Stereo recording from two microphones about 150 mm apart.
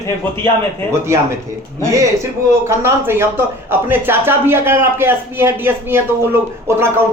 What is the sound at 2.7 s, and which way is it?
Speech, 15° right (ahead or behind).